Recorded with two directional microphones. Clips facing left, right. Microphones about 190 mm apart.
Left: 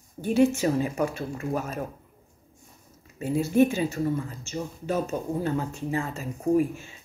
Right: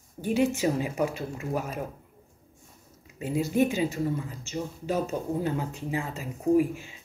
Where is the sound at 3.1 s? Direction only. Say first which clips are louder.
Left 4 dB; 15° right (ahead or behind).